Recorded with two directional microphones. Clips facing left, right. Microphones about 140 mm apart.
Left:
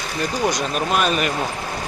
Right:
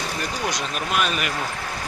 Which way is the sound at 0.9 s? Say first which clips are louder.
Left 4 dB; 40° left (ahead or behind).